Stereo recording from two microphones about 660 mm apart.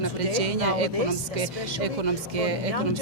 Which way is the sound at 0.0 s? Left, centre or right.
Right.